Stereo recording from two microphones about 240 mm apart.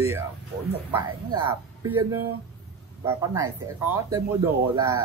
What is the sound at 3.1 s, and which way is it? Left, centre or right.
Speech, centre.